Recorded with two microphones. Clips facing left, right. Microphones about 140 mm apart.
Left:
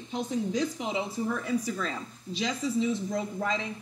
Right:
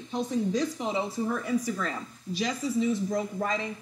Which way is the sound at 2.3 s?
20° left (ahead or behind).